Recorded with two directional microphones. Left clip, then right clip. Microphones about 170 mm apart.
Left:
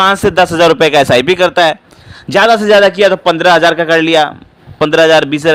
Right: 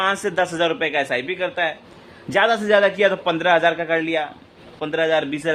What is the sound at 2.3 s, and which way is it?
A man's voice, 40° left (ahead or behind).